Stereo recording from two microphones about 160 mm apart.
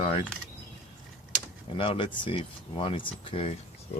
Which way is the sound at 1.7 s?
35° left (ahead or behind).